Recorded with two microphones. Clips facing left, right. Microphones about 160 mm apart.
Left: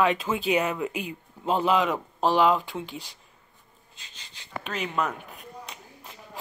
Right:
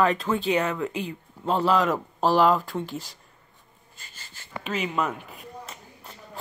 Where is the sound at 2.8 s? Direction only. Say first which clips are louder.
Right 4 dB; 45° right (ahead or behind).